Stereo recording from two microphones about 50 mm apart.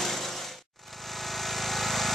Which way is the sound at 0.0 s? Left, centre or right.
Centre.